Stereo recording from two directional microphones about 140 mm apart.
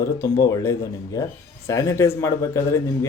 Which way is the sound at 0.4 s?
20° left (ahead or behind).